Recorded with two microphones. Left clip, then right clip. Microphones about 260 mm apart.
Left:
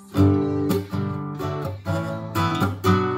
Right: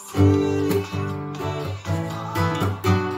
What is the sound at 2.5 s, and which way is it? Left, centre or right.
Music, left.